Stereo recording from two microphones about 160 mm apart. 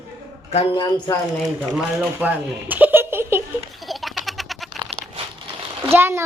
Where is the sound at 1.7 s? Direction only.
10° right (ahead or behind).